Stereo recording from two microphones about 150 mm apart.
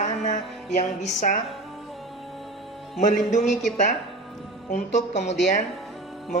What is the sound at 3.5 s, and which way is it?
Music, centre (ahead or behind).